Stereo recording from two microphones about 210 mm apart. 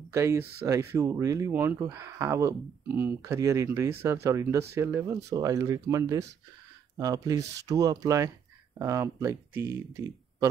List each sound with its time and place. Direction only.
0.1 s speech: 15° right (ahead or behind)